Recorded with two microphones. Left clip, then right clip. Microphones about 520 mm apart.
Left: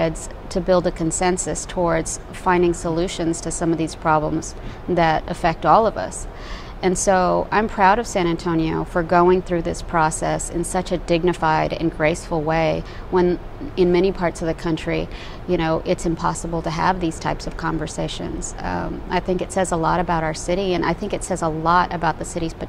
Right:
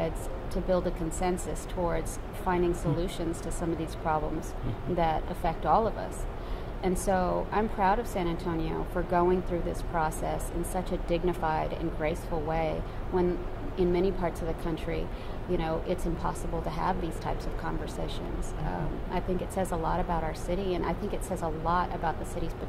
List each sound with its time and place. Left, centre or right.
0.0 s a woman's voice: left